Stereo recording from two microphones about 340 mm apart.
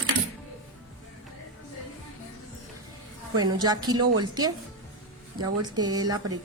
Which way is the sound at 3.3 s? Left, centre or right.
Centre.